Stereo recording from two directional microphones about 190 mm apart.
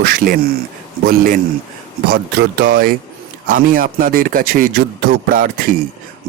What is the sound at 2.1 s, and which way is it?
Speech, 60° right (ahead or behind).